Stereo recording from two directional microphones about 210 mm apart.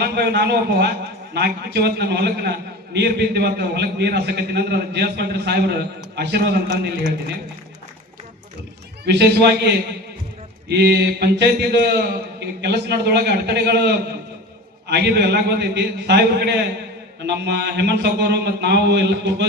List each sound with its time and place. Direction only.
0.0 s a man's voice: 50° right (ahead or behind)
9.0 s a man's voice: 50° right (ahead or behind)
10.7 s a man's voice: 50° right (ahead or behind)